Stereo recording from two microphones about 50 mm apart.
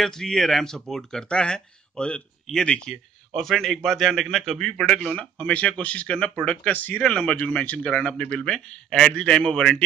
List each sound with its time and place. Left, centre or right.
0.0 s a man's voice: centre
3.3 s a man's voice: centre
5.1 s speech: centre
5.5 s speech: left
8.4 s a man's voice: centre